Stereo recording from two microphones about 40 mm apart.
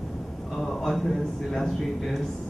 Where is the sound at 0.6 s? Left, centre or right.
Centre.